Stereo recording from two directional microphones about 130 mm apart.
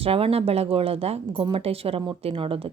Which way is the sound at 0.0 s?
50° right (ahead or behind).